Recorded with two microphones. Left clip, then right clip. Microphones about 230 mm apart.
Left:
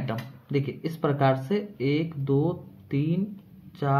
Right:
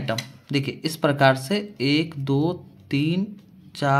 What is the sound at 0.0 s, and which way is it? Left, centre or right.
Speech, right.